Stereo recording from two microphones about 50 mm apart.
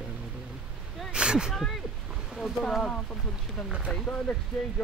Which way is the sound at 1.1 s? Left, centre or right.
Centre.